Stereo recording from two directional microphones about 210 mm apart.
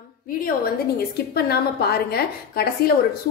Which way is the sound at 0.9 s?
50° left (ahead or behind).